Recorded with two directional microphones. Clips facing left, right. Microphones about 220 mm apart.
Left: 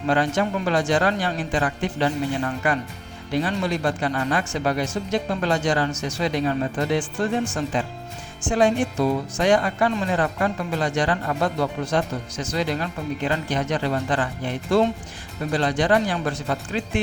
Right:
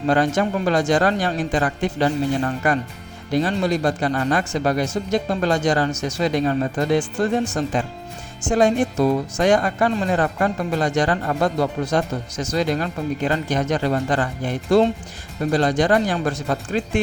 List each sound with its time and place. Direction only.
0.1 s speech: 40° right (ahead or behind)